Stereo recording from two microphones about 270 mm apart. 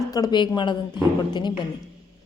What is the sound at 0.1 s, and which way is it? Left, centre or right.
A man's voice, centre.